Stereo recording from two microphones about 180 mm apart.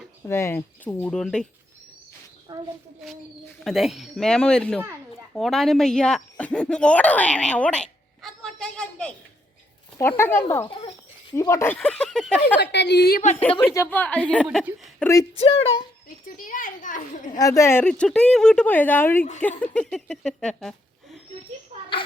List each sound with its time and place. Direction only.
0.3 s a woman's voice: 15° left (ahead or behind)
2.5 s a child's voice: 25° right (ahead or behind)
3.6 s a woman's voice: centre (ahead or behind)
12.7 s a woman's voice: 70° left (ahead or behind)
13.7 s a woman's voice: 10° left (ahead or behind)
14.4 s a woman's voice: 5° right (ahead or behind)
14.9 s a woman's voice: 15° left (ahead or behind)
16.2 s a child's voice: 45° left (ahead or behind)
17.3 s a woman's voice: 20° left (ahead or behind); by 21.2 s centre (ahead or behind)